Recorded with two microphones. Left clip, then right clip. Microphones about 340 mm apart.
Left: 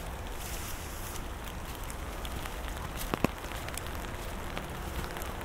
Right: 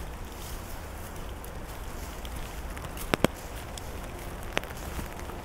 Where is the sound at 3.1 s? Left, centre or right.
Centre.